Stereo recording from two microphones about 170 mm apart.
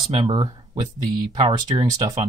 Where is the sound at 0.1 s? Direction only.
25° right (ahead or behind).